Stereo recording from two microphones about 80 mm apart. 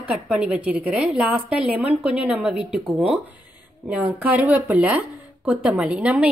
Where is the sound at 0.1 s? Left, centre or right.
Centre.